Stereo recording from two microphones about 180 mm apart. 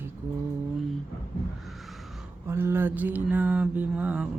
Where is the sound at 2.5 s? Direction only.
15° right (ahead or behind).